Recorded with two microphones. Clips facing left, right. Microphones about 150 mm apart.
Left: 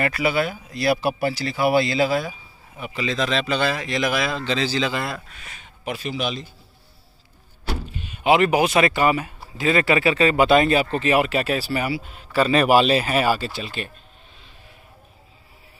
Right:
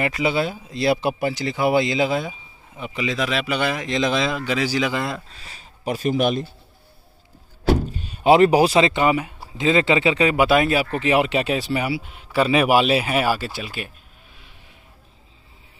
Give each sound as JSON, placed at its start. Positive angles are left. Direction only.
{"t": 0.0, "sound": "speech", "side_deg": -20}
{"t": 5.3, "sound": "speech", "side_deg": -30}
{"t": 7.6, "sound": "speech", "side_deg": -40}